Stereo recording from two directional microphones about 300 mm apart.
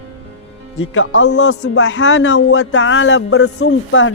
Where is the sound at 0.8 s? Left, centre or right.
Left.